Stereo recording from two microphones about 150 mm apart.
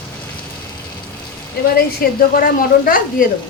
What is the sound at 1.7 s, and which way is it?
A woman's voice, 80° left.